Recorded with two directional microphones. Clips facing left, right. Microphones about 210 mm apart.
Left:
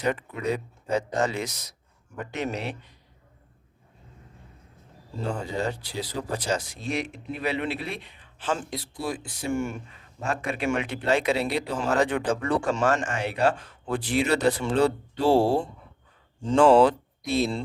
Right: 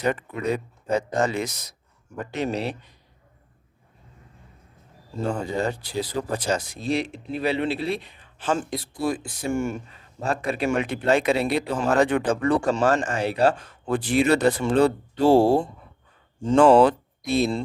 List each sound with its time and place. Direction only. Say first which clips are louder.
0.1 s speech: right 2 dB; 50° right (ahead or behind)
2.1 s speech: right 4 dB; 35° right (ahead or behind)
5.3 s speech: right 3 dB; 50° right (ahead or behind)
6.8 s speech: right 4 dB; 30° right (ahead or behind); by 9.7 s 45° right (ahead or behind)
10.2 s speech: right 4 dB; 35° right (ahead or behind); by 12.5 s 55° right (ahead or behind)
12.7 s speech: right 3 dB; 35° right (ahead or behind); by 17.6 s 55° right (ahead or behind)